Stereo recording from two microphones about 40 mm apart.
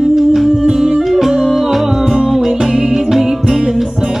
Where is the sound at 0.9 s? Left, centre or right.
Centre.